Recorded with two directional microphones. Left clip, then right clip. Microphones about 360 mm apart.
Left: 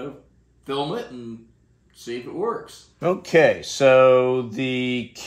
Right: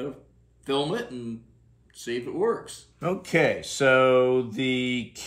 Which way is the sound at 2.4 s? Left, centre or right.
Centre.